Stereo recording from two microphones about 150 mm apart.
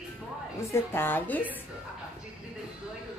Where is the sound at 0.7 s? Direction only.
15° left (ahead or behind).